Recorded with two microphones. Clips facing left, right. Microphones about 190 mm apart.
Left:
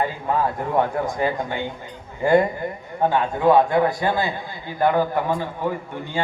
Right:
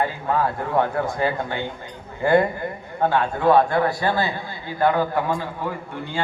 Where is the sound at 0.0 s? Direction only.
15° left (ahead or behind).